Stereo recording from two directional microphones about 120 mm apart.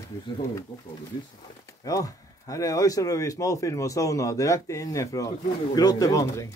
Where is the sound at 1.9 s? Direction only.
30° left (ahead or behind).